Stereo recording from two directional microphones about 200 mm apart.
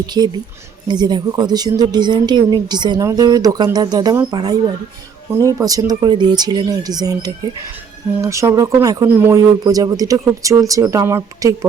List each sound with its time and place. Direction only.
0.0 s speech: 20° right (ahead or behind)